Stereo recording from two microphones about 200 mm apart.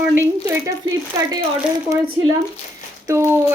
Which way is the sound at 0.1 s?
15° right (ahead or behind).